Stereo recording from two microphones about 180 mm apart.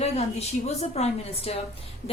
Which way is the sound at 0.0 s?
35° left (ahead or behind).